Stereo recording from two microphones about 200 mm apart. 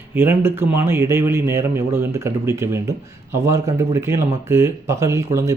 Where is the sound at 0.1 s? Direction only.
10° right (ahead or behind).